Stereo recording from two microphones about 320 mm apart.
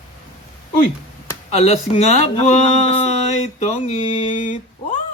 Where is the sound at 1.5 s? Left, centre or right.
Left.